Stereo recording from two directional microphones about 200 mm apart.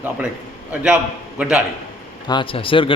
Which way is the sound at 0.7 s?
10° right (ahead or behind).